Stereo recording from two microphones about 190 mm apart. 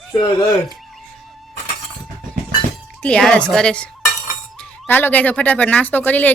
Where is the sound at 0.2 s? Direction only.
25° left (ahead or behind).